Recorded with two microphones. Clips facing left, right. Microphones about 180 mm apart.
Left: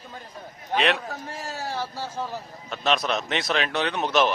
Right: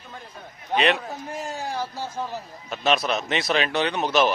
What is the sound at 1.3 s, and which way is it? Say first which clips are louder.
A man's voice: right 3 dB; 20° right (ahead or behind).